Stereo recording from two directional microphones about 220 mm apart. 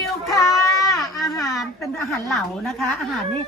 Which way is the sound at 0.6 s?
15° left (ahead or behind).